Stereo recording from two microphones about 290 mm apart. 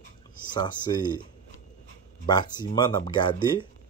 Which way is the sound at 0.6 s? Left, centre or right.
Centre.